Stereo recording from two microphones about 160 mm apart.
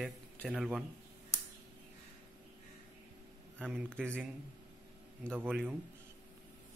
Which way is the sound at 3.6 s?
10° right (ahead or behind).